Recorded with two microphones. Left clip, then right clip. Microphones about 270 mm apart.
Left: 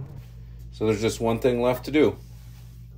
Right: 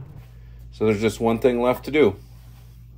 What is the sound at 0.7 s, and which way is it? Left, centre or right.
Speech, right.